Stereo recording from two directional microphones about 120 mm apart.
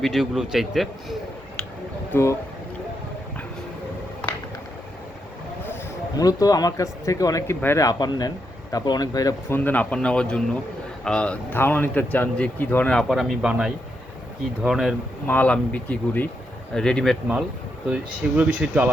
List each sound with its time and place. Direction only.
0.0 s a man's voice: centre (ahead or behind)
2.1 s speech: 15° left (ahead or behind)
6.1 s speech: 30° left (ahead or behind)
7.9 s speech: 35° left (ahead or behind)
9.5 s a man's voice: 15° left (ahead or behind); by 14.9 s 5° right (ahead or behind)
15.3 s a man's voice: 10° left (ahead or behind)
17.8 s speech: 10° right (ahead or behind)